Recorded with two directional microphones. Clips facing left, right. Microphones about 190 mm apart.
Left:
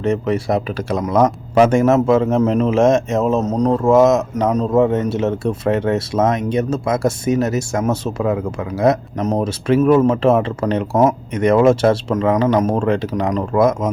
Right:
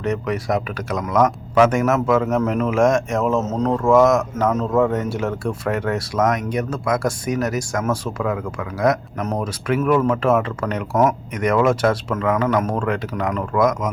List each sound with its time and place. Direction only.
0.0 s speech: 30° left (ahead or behind)